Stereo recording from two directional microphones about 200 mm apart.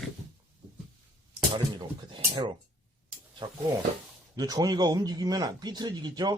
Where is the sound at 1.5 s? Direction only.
25° right (ahead or behind).